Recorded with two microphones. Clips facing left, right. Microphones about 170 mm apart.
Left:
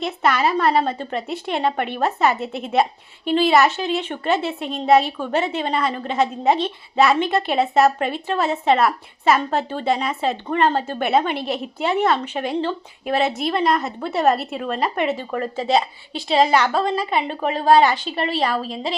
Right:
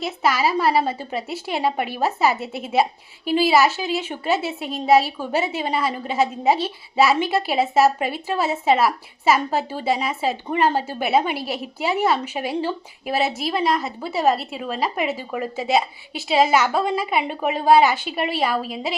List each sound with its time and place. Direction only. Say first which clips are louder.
0.0 s a woman's voice: left 1 dB; 5° right (ahead or behind)